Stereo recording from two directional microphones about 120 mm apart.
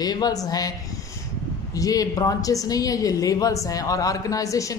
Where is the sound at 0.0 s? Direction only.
35° left (ahead or behind).